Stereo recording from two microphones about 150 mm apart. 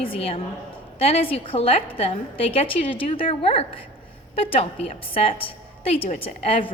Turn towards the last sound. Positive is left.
turn(degrees=40)  # may be behind; listen again after turning